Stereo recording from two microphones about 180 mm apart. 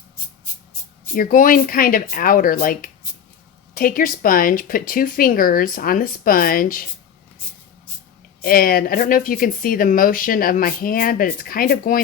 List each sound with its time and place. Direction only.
1.1 s speech: 50° left (ahead or behind)
8.4 s speech: 55° left (ahead or behind)